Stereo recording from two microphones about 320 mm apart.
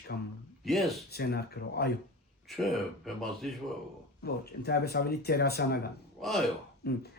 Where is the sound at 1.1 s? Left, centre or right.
Left.